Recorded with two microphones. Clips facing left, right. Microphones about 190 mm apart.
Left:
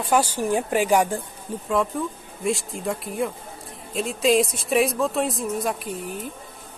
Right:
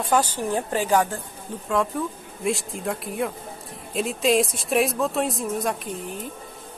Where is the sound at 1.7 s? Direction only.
Centre (ahead or behind).